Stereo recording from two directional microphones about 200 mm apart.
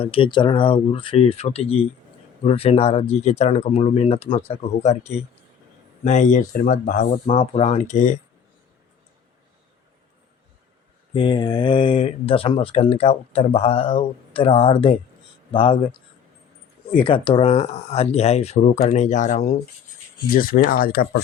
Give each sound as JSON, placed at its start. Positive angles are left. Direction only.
{"t": 0.0, "sound": "speech", "side_deg": 25}
{"t": 11.1, "sound": "speech", "side_deg": 25}